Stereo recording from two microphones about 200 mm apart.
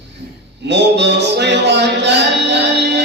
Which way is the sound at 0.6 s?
60° right (ahead or behind).